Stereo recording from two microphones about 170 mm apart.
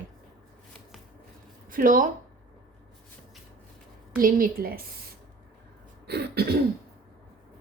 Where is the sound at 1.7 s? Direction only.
55° right (ahead or behind).